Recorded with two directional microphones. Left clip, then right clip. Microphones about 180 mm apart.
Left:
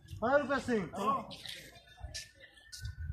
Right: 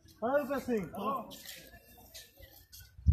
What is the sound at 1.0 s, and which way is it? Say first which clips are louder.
Speech: left 3 dB; 50° right (ahead or behind).